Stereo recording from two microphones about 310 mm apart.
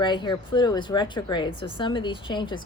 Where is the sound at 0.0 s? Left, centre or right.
Centre.